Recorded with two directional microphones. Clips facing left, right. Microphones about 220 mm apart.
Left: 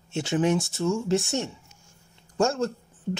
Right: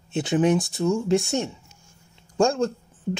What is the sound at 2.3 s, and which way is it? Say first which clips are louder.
Speech: right 3 dB; 15° right (ahead or behind).